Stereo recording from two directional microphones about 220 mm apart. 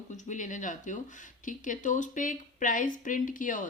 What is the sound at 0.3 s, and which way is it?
Speech, 35° left (ahead or behind).